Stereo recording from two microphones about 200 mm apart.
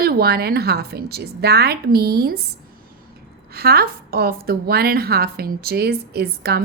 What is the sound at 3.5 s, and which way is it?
A woman's voice, 50° right (ahead or behind).